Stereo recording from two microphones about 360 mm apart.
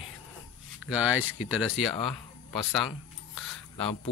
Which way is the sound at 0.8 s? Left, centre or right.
Centre.